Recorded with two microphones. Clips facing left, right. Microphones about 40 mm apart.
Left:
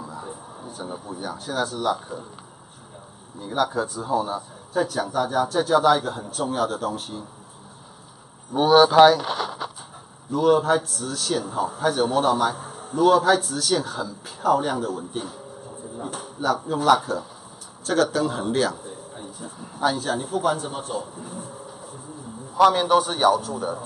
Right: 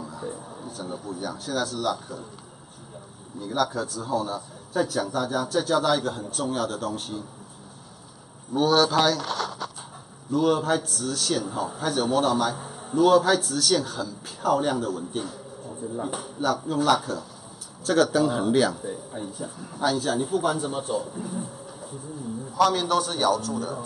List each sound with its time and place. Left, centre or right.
0.0 s speech: centre
3.3 s a man's voice: centre
8.5 s speech: left
10.3 s a man's voice: centre
22.6 s a man's voice: centre